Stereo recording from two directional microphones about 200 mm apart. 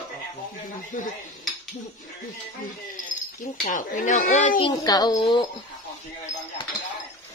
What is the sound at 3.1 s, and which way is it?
Cricket, 40° left (ahead or behind).